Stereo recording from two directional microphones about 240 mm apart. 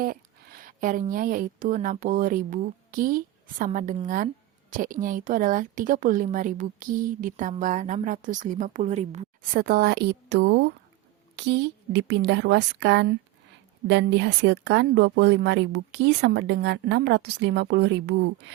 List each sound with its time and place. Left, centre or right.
0.0 s speech: right